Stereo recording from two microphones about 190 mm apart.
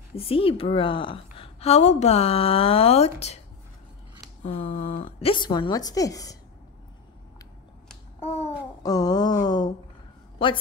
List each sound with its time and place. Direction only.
0.2 s a woman's voice: 30° left (ahead or behind)
4.4 s a sound: 40° left (ahead or behind)
5.0 s a woman's voice: 25° left (ahead or behind)
8.8 s a woman's voice: 20° left (ahead or behind)